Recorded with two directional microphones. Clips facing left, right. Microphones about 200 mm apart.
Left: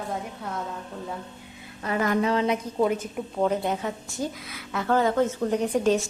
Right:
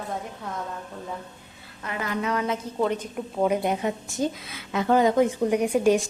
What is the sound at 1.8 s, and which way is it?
Speech, 40° left (ahead or behind).